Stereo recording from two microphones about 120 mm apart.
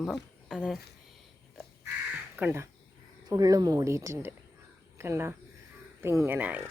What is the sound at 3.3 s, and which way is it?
A woman's voice, 30° right (ahead or behind).